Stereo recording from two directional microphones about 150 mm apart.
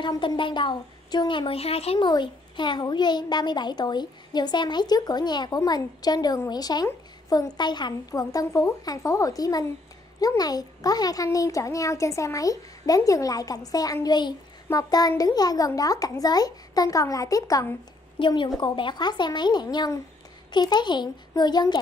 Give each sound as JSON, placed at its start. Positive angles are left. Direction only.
{"t": 0.0, "sound": "a woman's voice", "side_deg": 30}
{"t": 2.0, "sound": "a child's voice", "side_deg": 30}